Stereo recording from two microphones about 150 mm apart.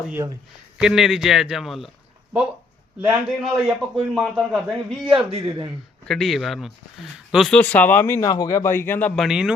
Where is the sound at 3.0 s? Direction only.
5° right (ahead or behind).